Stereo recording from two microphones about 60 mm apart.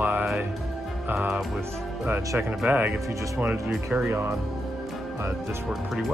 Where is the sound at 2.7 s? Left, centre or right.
Right.